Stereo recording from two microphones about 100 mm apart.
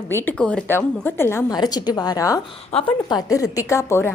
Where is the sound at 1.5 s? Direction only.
45° left (ahead or behind).